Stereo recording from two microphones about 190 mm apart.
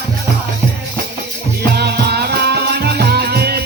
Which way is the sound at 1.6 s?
55° right (ahead or behind).